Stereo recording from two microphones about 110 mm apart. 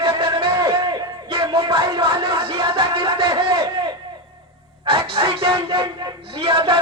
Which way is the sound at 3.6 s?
35° right (ahead or behind).